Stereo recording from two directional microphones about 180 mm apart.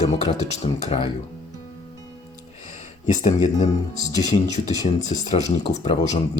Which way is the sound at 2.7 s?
45° left (ahead or behind).